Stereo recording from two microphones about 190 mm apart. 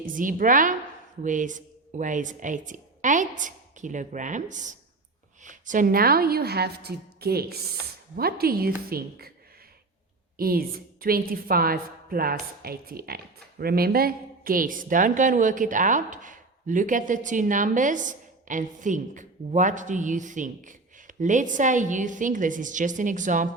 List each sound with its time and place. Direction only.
0.0 s a woman's voice: 45° right (ahead or behind)
10.3 s a woman's voice: 50° right (ahead or behind)